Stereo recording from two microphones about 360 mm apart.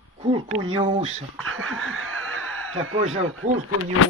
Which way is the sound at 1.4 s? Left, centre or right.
Right.